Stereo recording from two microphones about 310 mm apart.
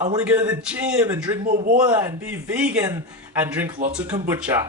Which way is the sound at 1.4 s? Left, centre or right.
Right.